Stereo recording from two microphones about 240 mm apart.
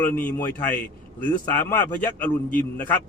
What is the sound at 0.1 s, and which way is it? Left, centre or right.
A man's voice, centre.